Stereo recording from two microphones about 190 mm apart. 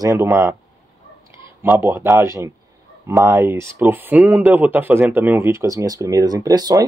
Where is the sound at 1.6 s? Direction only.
15° right (ahead or behind).